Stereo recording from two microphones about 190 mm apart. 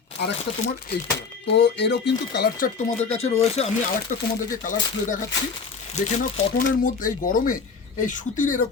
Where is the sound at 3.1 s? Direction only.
35° left (ahead or behind).